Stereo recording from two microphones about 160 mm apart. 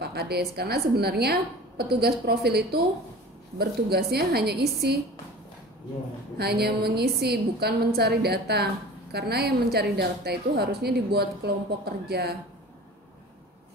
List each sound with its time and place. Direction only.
0.0 s a woman's voice: 90° right
6.3 s a woman's voice: 90° right